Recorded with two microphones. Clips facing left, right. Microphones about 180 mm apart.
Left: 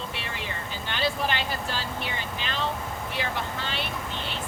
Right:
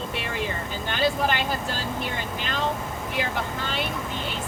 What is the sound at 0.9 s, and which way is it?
Speech, 50° right (ahead or behind).